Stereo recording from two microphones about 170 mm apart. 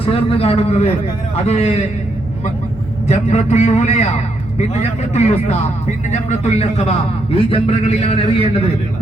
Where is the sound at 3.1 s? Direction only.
40° left (ahead or behind).